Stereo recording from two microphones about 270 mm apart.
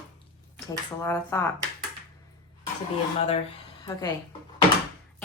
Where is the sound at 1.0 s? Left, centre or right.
Centre.